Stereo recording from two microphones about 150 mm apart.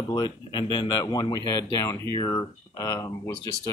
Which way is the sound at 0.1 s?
30° left (ahead or behind).